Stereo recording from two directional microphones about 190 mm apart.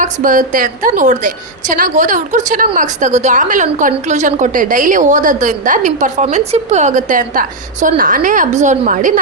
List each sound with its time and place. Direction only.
0.0 s a woman's voice: 45° right (ahead or behind)